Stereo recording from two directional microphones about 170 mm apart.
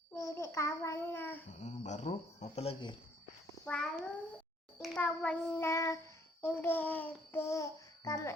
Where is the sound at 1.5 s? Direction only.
40° left (ahead or behind).